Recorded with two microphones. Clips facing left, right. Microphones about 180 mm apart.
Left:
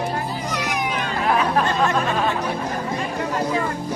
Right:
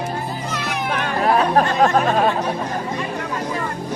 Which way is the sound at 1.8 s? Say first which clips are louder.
Right 4 dB; 40° right (ahead or behind).